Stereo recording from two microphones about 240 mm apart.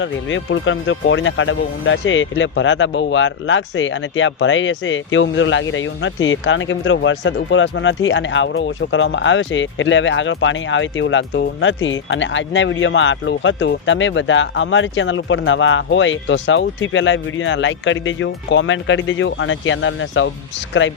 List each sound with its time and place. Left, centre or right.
0.0 s speech: left